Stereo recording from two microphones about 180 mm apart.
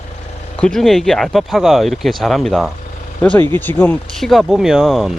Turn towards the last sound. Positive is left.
turn(degrees=0)  # may be behind; listen again after turning